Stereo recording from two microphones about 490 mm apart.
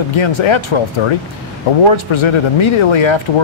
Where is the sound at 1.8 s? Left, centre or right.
Left.